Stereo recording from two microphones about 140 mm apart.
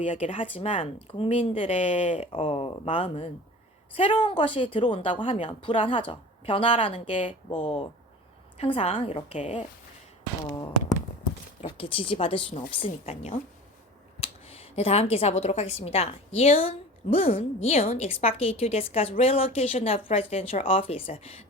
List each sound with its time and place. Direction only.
0.0 s speech: 60° left (ahead or behind)
0.3 s a woman's voice: 40° left (ahead or behind)
11.8 s a woman's voice: 40° left (ahead or behind)